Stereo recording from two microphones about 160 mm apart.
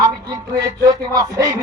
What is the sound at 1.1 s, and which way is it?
Speech, 20° right (ahead or behind).